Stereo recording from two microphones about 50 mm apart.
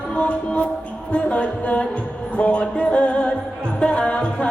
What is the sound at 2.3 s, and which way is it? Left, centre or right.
Music, left.